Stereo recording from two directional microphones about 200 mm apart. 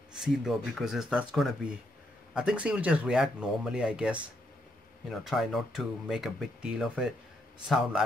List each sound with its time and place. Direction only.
0.2 s speech: centre (ahead or behind)